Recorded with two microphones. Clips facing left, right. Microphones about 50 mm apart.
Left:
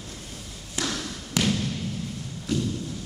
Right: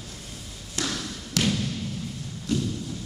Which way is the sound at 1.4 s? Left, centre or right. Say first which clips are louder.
Even; centre.